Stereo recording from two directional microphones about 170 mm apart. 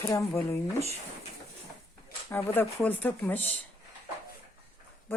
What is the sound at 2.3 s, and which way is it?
Speech, 10° left (ahead or behind).